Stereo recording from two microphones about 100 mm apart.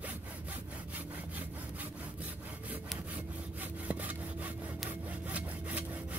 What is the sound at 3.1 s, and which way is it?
Sawing, 15° right (ahead or behind).